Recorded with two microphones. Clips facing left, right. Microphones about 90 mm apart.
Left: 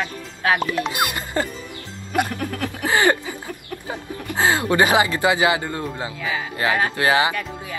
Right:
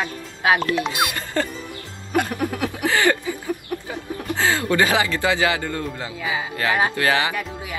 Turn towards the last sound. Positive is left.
turn(degrees=20)  # may be behind; listen again after turning